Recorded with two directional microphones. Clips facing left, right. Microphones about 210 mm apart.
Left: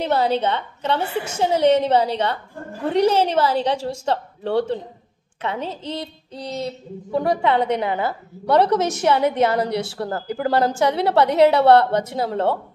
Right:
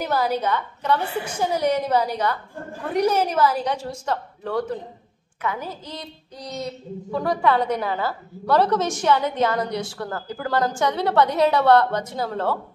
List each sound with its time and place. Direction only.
0.0 s a woman's voice: 25° left (ahead or behind)
9.7 s a woman's voice: 65° left (ahead or behind)
9.9 s a woman's voice: 30° left (ahead or behind)